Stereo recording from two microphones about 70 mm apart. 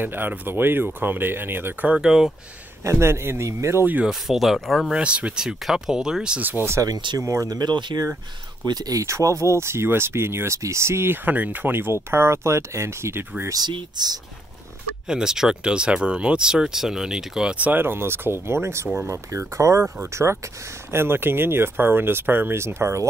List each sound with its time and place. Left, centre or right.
0.0 s speech: right
1.9 s speech: centre
2.8 s speech: right
4.1 s speech: centre
4.9 s speech: centre
6.4 s speech: right
6.8 s speech: right
7.4 s speech: right
8.6 s speech: right
9.0 s speech: right
13.5 s speech: right
15.0 s speech: centre
17.6 s speech: right